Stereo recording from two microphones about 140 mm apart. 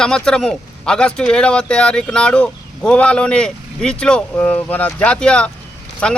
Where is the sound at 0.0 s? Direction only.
5° left (ahead or behind).